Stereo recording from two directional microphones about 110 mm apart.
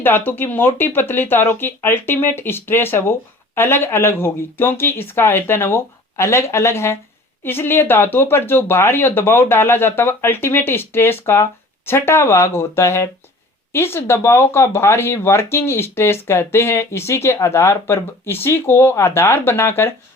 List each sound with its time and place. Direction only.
0.0 s speech: 20° left (ahead or behind)